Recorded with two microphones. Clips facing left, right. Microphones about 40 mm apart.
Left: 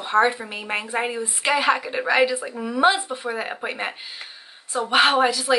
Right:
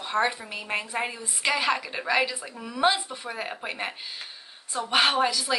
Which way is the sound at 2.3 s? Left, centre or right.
Left.